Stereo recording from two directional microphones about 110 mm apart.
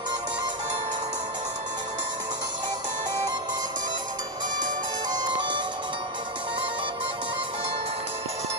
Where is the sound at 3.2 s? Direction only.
40° right (ahead or behind).